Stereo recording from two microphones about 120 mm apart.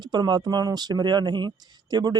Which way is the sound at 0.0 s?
35° right (ahead or behind).